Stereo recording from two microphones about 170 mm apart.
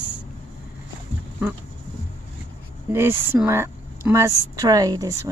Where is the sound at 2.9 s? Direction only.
15° right (ahead or behind).